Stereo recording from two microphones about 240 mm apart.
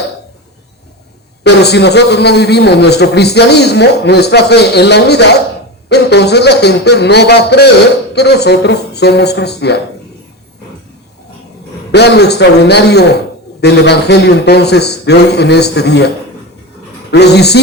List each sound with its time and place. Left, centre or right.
1.5 s a man's voice: left
11.9 s a man's voice: left